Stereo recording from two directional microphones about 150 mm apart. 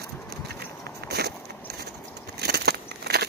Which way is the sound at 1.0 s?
90° right.